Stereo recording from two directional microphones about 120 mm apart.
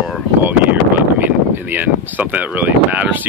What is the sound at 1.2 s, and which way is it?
Speech, 15° right (ahead or behind).